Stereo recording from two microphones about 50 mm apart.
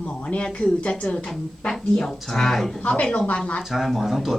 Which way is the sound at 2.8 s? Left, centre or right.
Left.